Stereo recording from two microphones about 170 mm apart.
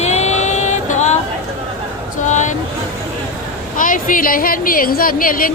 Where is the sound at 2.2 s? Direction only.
45° left (ahead or behind).